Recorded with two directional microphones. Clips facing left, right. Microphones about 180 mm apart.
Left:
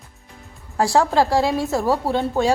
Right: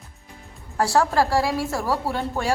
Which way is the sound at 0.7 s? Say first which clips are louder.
Left 3 dB; 15° left (ahead or behind).